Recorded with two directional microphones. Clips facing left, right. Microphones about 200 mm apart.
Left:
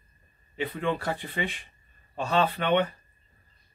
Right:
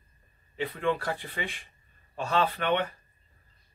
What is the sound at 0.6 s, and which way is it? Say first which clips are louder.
Speech: even; 20° left (ahead or behind).